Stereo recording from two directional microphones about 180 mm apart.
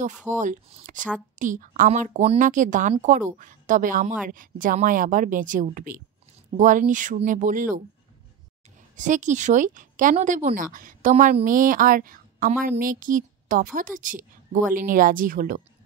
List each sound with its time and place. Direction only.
0.3 s speech: 45° right (ahead or behind)
8.9 s speech: 45° right (ahead or behind)